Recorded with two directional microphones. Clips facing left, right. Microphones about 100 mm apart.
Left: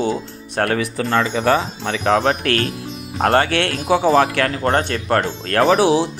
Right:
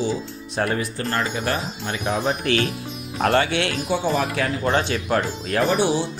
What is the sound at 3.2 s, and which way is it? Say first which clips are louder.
Speech: left 3 dB; 45° left (ahead or behind).